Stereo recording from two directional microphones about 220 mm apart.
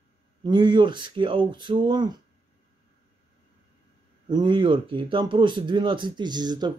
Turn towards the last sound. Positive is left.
turn(degrees=-20)  # may be behind; listen again after turning